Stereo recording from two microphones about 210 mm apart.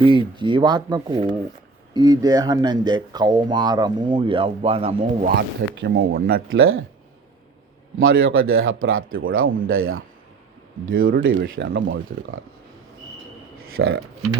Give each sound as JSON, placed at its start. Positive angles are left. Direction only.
{"t": 0.0, "sound": "speech", "side_deg": -25}
{"t": 4.9, "sound": "speech", "side_deg": -50}
{"t": 6.5, "sound": "speech", "side_deg": -70}
{"t": 7.9, "sound": "speech", "side_deg": -70}
{"t": 11.1, "sound": "speech", "side_deg": -60}
{"t": 11.5, "sound": "speech", "side_deg": -45}
{"t": 13.8, "sound": "speech", "side_deg": -65}